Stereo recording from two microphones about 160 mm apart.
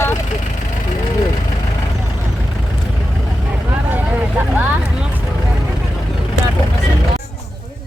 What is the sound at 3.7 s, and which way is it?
Vehicle, 10° right (ahead or behind).